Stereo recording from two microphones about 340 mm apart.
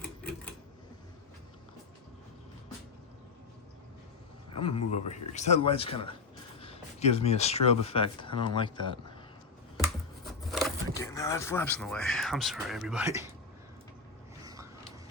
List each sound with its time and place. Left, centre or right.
4.5 s speech: centre
10.5 s speech: centre
14.4 s a sound: centre